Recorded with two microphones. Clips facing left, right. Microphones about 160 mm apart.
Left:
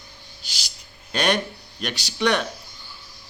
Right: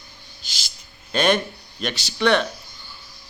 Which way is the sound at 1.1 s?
10° left (ahead or behind).